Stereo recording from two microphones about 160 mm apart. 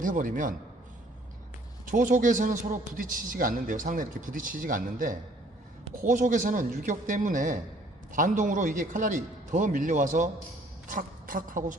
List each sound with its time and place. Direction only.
0.0 s a man's voice: 55° right (ahead or behind)
1.9 s a man's voice: 55° right (ahead or behind)